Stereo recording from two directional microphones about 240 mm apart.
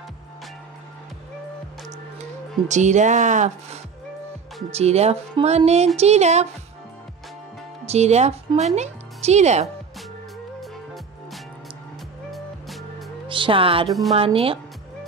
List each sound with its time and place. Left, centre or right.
2.7 s speech: right
7.8 s speech: right
12.3 s music: centre
13.3 s speech: right
13.8 s a woman's voice: centre
14.1 s speech: right